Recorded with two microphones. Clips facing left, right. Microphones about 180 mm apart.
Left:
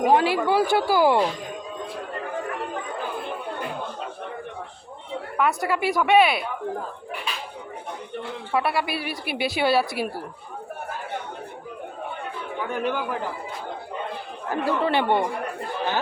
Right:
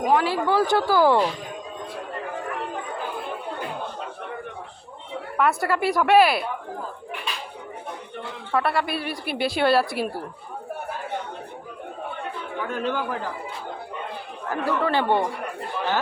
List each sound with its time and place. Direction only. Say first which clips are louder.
0.1 s speech: left 1 dB; 20° left (ahead or behind)
0.4 s speech: even; 10° left (ahead or behind)
5.4 s a woman's voice: right 1 dB; centre (ahead or behind)
8.5 s a woman's voice: right 1 dB; 5° left (ahead or behind)
12.7 s speech: even; 15° left (ahead or behind)
14.5 s speech: left 1 dB; 20° left (ahead or behind)